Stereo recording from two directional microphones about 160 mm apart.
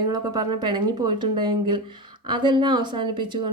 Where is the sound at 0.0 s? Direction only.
25° right (ahead or behind).